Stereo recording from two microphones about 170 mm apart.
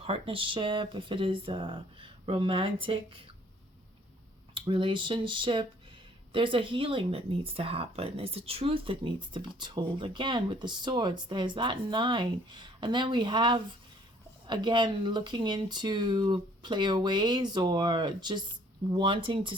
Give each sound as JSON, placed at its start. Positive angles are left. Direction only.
{"t": 0.0, "sound": "speech", "side_deg": -35}
{"t": 4.5, "sound": "speech", "side_deg": -30}